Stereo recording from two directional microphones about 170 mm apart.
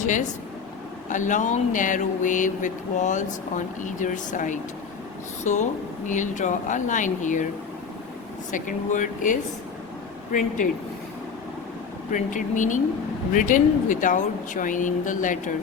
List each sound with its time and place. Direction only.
0.0 s speech: 45° left (ahead or behind)
8.5 s speech: 50° left (ahead or behind)
12.1 s speech: 50° left (ahead or behind)